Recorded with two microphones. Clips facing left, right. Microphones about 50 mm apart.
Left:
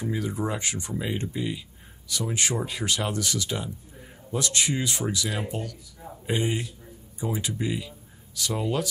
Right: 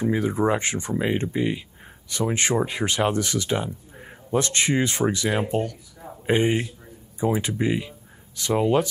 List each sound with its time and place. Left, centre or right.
0.0 s speech: right